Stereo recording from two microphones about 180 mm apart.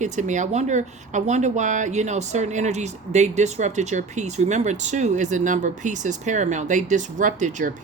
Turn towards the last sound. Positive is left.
turn(degrees=-45)  # may be behind; listen again after turning